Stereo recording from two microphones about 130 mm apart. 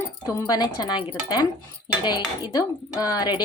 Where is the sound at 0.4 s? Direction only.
30° left (ahead or behind).